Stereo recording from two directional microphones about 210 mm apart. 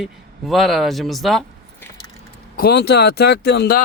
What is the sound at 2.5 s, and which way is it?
Speech, 45° left (ahead or behind).